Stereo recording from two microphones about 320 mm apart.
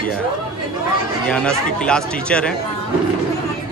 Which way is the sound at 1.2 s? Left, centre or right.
Centre.